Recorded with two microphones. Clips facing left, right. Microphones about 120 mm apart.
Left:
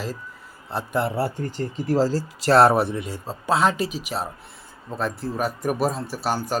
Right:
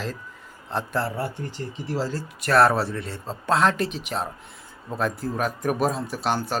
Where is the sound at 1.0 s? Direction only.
35° left (ahead or behind).